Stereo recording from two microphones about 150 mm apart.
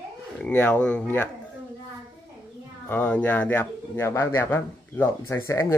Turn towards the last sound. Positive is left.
turn(degrees=20)  # may be behind; listen again after turning